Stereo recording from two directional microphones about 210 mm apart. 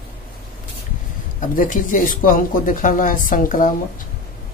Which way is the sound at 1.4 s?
40° left (ahead or behind).